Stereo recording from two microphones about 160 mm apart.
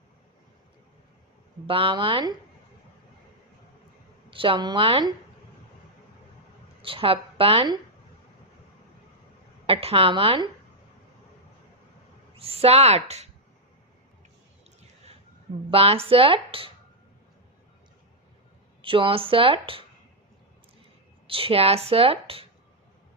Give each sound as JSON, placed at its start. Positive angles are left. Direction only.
{"t": 1.6, "sound": "speech", "side_deg": -35}
{"t": 4.3, "sound": "speech", "side_deg": -35}
{"t": 6.8, "sound": "speech", "side_deg": -35}
{"t": 9.6, "sound": "speech", "side_deg": -35}
{"t": 12.4, "sound": "speech", "side_deg": -40}
{"t": 14.8, "sound": "a sound", "side_deg": -40}
{"t": 15.7, "sound": "speech", "side_deg": -40}
{"t": 18.8, "sound": "speech", "side_deg": -35}
{"t": 21.2, "sound": "speech", "side_deg": -35}